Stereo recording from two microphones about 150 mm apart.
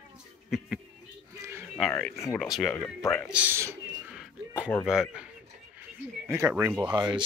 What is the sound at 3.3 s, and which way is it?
Speech, 10° right (ahead or behind).